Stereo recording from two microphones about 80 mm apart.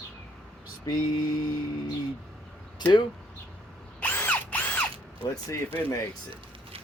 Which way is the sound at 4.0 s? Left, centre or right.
Left.